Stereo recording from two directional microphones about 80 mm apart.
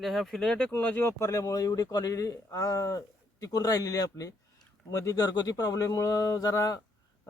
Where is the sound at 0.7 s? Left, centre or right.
Left.